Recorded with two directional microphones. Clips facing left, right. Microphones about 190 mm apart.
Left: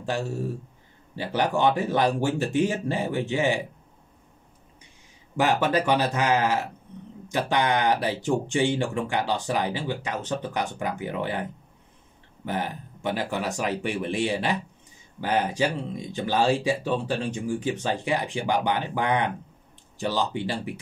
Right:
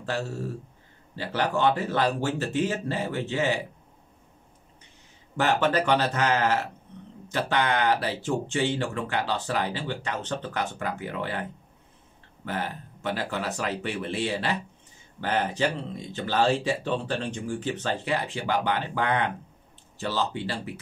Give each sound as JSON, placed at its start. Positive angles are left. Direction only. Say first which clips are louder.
{"t": 0.0, "sound": "speech", "louder": "left 2 dB", "side_deg": 15}
{"t": 5.4, "sound": "speech", "louder": "left 1 dB", "side_deg": 10}
{"t": 12.4, "sound": "speech", "louder": "left 2 dB", "side_deg": 15}